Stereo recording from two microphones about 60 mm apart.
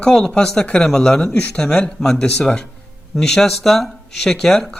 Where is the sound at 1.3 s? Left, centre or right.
Left.